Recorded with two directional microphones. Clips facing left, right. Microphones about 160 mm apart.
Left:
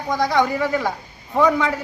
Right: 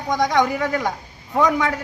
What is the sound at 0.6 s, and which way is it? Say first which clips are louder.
A man's voice: left 1 dB; 5° left (ahead or behind).